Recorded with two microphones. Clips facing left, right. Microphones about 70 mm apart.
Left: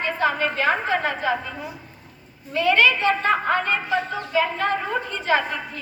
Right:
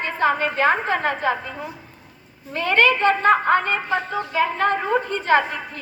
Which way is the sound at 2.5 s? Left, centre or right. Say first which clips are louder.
Even; right.